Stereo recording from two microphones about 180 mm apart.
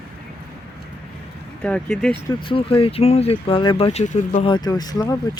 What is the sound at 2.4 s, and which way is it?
Speech, 30° left (ahead or behind).